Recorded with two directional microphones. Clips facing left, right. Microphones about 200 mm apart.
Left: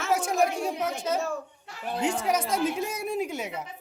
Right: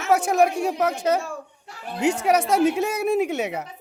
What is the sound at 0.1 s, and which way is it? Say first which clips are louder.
Speech: right 6 dB; 70° right (ahead or behind).